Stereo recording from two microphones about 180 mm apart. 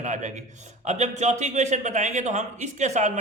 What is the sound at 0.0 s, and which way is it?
A man's voice, 40° right (ahead or behind).